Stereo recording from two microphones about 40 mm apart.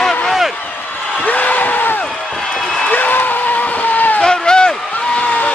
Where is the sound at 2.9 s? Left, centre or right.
Left.